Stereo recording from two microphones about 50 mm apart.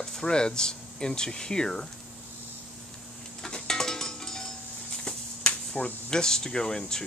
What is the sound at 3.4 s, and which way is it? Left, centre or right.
Dishes, centre.